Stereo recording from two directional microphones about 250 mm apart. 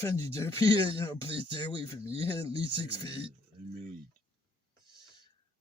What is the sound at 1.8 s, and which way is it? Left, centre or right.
Speech, right.